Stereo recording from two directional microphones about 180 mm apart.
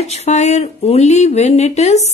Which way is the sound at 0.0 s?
35° left (ahead or behind).